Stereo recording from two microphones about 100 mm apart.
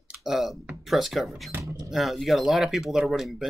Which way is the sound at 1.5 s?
20° right (ahead or behind).